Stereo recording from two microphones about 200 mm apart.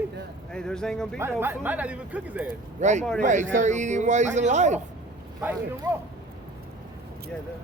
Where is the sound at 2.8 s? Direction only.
35° right (ahead or behind).